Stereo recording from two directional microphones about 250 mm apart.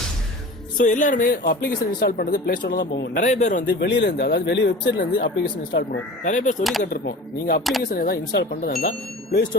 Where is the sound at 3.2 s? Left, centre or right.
Left.